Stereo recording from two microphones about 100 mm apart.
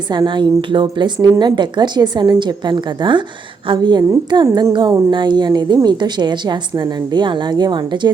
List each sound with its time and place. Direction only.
0.1 s a woman's voice: 50° right (ahead or behind)